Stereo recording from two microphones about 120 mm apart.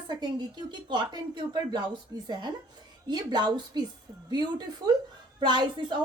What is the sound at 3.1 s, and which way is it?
A woman's voice, 35° right (ahead or behind).